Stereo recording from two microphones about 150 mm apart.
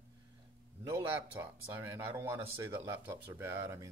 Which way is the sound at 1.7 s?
10° right (ahead or behind).